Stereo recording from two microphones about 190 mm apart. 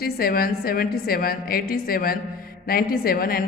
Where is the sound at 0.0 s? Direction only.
50° left (ahead or behind).